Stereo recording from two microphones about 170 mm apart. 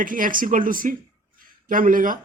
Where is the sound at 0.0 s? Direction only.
55° right (ahead or behind).